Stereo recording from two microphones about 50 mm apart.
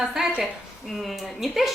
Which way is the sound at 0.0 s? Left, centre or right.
Centre.